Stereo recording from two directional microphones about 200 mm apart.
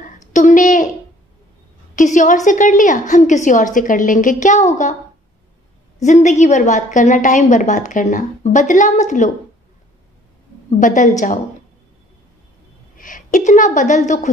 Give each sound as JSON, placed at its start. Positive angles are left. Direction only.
{"t": 0.3, "sound": "a sound", "side_deg": 35}
{"t": 2.0, "sound": "a woman's voice", "side_deg": 40}
{"t": 6.0, "sound": "a woman's voice", "side_deg": 35}
{"t": 10.8, "sound": "a woman's voice", "side_deg": 40}
{"t": 12.9, "sound": "a woman's voice", "side_deg": 40}